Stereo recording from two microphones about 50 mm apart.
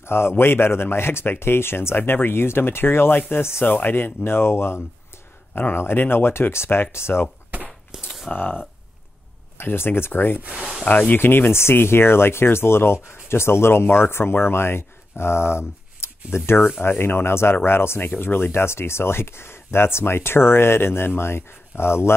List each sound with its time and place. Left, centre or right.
0.0 s speech: left
5.5 s a man's voice: left
7.9 s speech: centre
8.4 s speech: left
10.9 s speech: left
11.1 s speech: left